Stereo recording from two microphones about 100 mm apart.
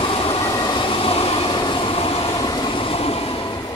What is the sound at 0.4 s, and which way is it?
Train, 40° left (ahead or behind).